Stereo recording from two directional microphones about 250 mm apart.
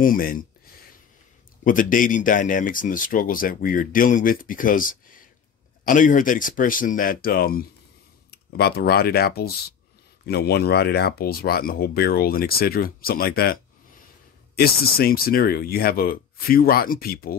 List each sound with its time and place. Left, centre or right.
0.0 s speech: left
1.6 s speech: left